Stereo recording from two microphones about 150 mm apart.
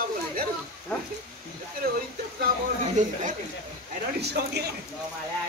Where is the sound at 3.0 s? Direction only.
55° right (ahead or behind).